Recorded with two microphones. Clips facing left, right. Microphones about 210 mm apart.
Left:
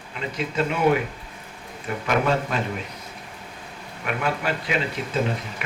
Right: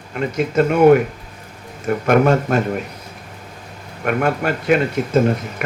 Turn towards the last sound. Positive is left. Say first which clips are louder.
# right 9 dB
turn(degrees=-45)  # may be behind; listen again after turning